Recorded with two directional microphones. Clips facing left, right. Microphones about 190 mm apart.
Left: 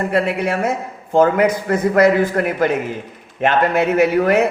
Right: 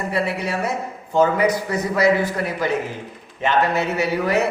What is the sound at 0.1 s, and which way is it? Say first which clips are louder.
A man's voice: left 5 dB; 55° left (ahead or behind).